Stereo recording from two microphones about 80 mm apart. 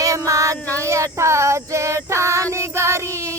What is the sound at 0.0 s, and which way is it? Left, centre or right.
Female singing, right.